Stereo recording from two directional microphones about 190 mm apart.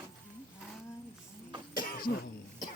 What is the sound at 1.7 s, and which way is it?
Cough, 50° left (ahead or behind).